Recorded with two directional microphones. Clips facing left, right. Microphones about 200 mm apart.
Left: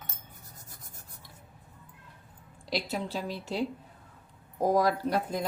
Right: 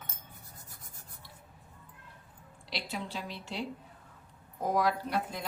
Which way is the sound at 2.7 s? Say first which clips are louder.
Left 6 dB; 40° left (ahead or behind).